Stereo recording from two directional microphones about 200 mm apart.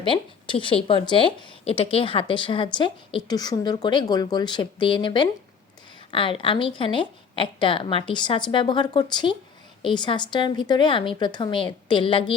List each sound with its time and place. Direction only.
0.0 s a woman's voice: 25° left (ahead or behind)